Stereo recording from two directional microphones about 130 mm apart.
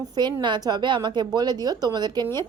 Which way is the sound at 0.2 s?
35° right (ahead or behind).